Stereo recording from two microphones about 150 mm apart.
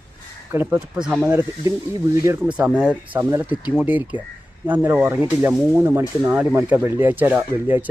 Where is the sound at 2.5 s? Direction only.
5° right (ahead or behind).